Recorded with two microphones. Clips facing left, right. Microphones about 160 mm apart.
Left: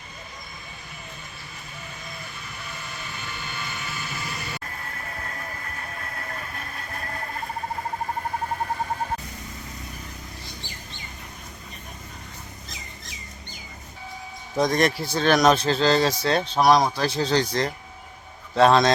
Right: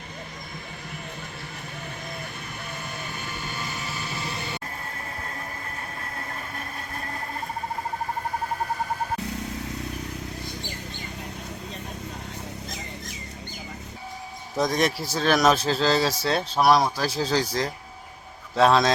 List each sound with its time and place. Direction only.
3.1 s vehicle: 45° right (ahead or behind); by 4.6 s 25° right (ahead or behind)
14.5 s speech: centre (ahead or behind)